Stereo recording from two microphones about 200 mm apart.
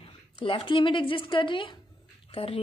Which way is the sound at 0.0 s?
25° left (ahead or behind).